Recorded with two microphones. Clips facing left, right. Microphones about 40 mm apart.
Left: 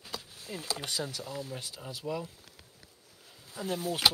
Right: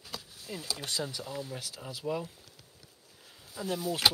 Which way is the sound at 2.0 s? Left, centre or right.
Right.